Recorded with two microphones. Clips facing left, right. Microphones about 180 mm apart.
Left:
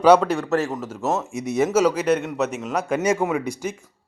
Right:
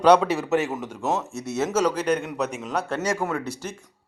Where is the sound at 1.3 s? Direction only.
15° left (ahead or behind).